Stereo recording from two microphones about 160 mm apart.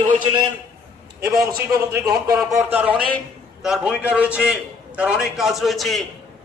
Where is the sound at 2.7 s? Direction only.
10° right (ahead or behind).